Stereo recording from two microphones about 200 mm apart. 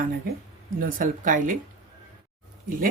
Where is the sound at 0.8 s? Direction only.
45° right (ahead or behind).